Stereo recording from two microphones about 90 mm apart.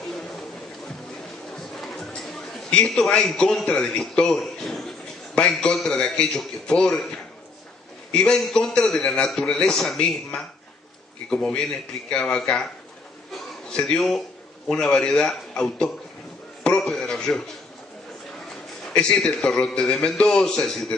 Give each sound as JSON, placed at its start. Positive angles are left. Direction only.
{"t": 1.5, "sound": "a man's voice", "side_deg": 0}
{"t": 13.3, "sound": "a sound", "side_deg": 10}
{"t": 14.7, "sound": "a man's voice", "side_deg": 10}
{"t": 18.5, "sound": "a man's voice", "side_deg": 10}